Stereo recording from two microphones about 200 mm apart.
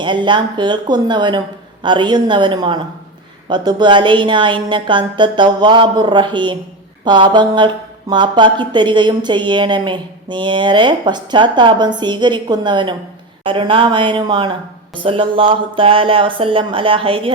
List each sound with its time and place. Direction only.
0.0 s a woman's voice: 25° right (ahead or behind)